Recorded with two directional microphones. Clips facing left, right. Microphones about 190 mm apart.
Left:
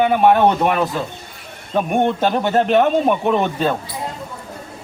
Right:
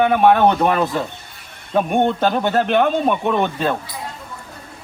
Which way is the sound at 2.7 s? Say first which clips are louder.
Left 3 dB; 5° left (ahead or behind).